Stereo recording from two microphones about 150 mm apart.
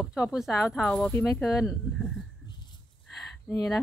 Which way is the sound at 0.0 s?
Centre (ahead or behind).